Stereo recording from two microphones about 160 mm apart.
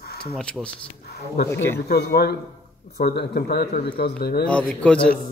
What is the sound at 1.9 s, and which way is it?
Speech, 85° left.